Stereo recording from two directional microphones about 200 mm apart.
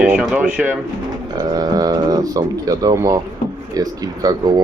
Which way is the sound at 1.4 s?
20° right (ahead or behind).